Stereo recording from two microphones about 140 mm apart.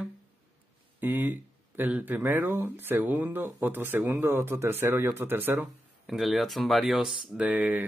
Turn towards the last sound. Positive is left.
turn(degrees=-10)  # may be behind; listen again after turning